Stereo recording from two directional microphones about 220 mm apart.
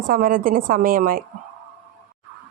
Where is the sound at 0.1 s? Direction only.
40° right (ahead or behind).